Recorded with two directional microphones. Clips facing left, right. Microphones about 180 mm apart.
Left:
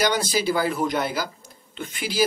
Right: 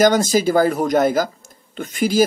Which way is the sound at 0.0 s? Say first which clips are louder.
Right 8 dB; 45° right (ahead or behind).